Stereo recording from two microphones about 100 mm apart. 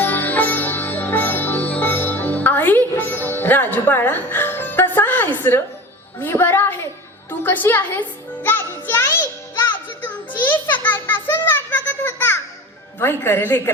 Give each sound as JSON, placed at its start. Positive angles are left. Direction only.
{"t": 0.0, "sound": "sitar", "side_deg": 20}
{"t": 5.4, "sound": "a child's voice", "side_deg": 20}
{"t": 9.7, "sound": "a sound", "side_deg": 20}
{"t": 13.0, "sound": "a child's voice", "side_deg": 25}